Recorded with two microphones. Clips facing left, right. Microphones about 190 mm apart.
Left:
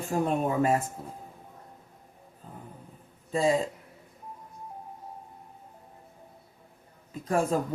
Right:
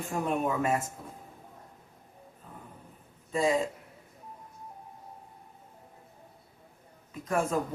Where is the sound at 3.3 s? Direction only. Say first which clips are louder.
Left 2 dB; 30° left (ahead or behind).